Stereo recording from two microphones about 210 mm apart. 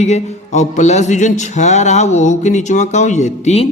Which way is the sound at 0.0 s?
30° left (ahead or behind).